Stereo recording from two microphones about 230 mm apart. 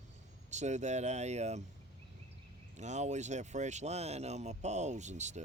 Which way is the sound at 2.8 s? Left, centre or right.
Right.